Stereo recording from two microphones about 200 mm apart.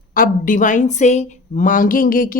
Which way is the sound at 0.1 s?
45° left (ahead or behind).